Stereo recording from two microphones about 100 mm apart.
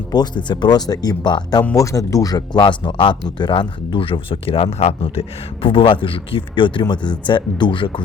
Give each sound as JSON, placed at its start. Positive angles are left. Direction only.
{"t": 0.1, "sound": "speech", "side_deg": 45}
{"t": 1.7, "sound": "speech", "side_deg": 35}
{"t": 5.6, "sound": "speech", "side_deg": 60}